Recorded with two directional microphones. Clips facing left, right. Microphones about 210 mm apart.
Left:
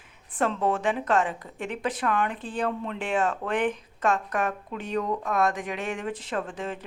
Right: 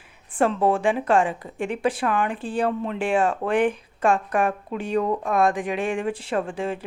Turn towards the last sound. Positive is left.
turn(degrees=-10)  # may be behind; listen again after turning